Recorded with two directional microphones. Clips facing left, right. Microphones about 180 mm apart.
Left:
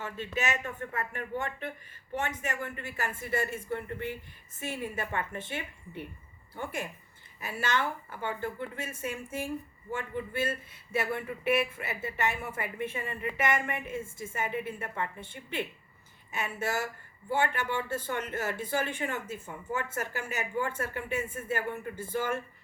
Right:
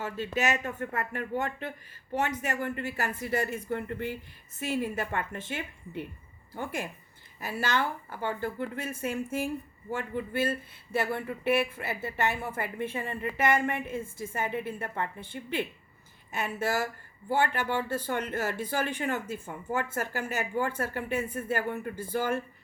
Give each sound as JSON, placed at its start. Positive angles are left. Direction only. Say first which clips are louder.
{"t": 0.0, "sound": "speech", "louder": "right 4 dB", "side_deg": -40}
{"t": 7.4, "sound": "speech", "louder": "right 2 dB", "side_deg": -35}
{"t": 16.3, "sound": "speech", "louder": "right 3 dB", "side_deg": -35}